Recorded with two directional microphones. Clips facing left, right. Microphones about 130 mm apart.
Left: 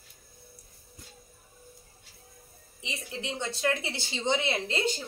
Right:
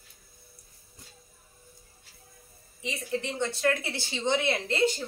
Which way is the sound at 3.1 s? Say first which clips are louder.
Right 5 dB; 15° left (ahead or behind).